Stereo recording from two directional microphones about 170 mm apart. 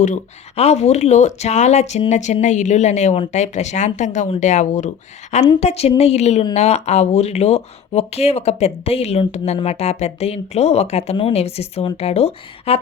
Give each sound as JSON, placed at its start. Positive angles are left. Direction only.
{"t": 0.0, "sound": "speech", "side_deg": 40}